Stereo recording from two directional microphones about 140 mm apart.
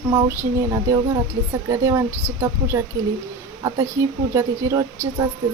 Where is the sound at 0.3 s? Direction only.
25° right (ahead or behind).